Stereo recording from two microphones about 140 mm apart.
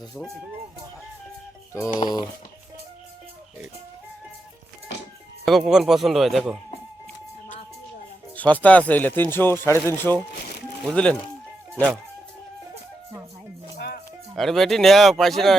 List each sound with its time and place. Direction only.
2.0 s speech: 30° left (ahead or behind)
5.5 s speech: centre (ahead or behind)
8.4 s speech: 10° left (ahead or behind)
14.3 s speech: centre (ahead or behind)